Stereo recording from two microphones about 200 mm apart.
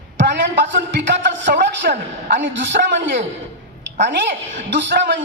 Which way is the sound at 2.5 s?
65° right (ahead or behind).